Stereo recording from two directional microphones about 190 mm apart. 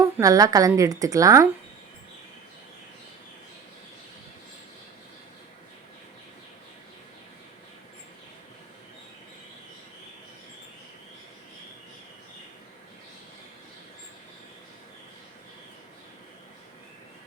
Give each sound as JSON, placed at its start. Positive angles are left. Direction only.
{"t": 0.0, "sound": "a woman's voice", "side_deg": -15}